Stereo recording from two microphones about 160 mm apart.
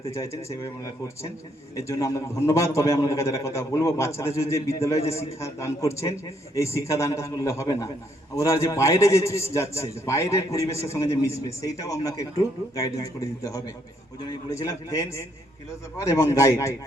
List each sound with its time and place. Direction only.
0.1 s a man's voice: 20° left (ahead or behind)